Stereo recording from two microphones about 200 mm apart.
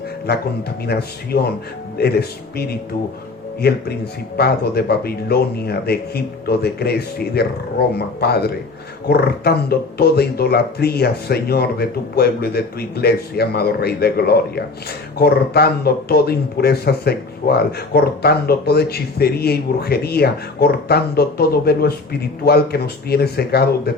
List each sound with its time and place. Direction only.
0.9 s speech: 55° left (ahead or behind)